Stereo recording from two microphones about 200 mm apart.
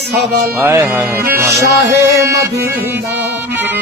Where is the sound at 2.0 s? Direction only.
15° right (ahead or behind).